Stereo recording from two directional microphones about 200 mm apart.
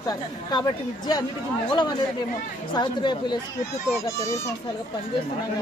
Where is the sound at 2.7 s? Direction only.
20° left (ahead or behind).